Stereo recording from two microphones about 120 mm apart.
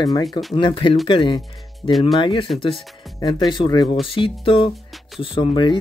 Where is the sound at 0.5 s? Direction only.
45° left (ahead or behind).